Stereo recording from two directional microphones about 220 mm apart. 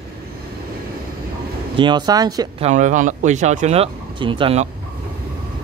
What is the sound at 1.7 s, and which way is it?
Speech, 20° right (ahead or behind).